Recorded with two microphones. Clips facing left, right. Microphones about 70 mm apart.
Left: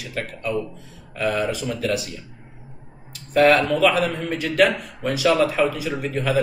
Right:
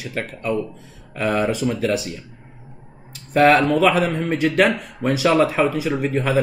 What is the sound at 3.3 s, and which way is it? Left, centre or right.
A man's voice, right.